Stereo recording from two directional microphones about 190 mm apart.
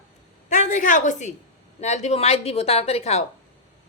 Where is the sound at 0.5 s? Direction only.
40° left (ahead or behind).